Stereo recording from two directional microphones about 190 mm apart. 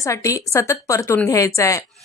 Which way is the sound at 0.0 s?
15° left (ahead or behind).